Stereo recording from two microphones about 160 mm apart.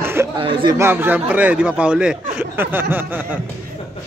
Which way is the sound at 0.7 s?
15° right (ahead or behind).